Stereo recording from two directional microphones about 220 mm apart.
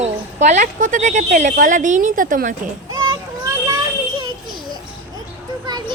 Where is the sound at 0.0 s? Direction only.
30° right (ahead or behind).